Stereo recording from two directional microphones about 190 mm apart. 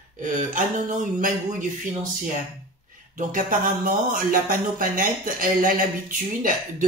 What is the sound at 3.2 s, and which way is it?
Speech, 45° right (ahead or behind).